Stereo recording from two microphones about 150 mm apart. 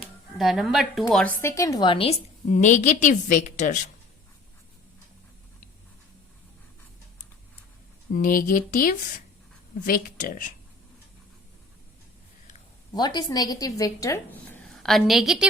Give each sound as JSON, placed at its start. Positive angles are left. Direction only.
{"t": 0.3, "sound": "speech", "side_deg": 0}
{"t": 1.4, "sound": "a woman's voice", "side_deg": 20}
{"t": 8.1, "sound": "speech", "side_deg": 70}
{"t": 12.9, "sound": "a woman's voice", "side_deg": 30}
{"t": 14.8, "sound": "speech", "side_deg": 0}